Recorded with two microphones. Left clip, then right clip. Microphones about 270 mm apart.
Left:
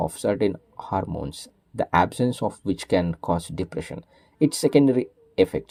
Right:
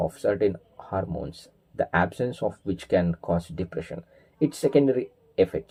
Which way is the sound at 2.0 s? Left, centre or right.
Left.